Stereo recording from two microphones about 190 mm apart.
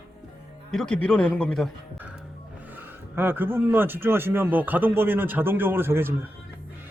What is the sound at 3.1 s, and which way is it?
A man's voice, 10° right (ahead or behind).